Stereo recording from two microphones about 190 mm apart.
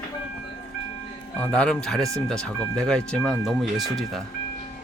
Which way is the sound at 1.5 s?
5° left (ahead or behind).